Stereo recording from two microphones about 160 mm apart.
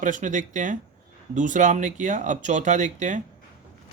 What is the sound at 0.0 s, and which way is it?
Speech, 55° right (ahead or behind).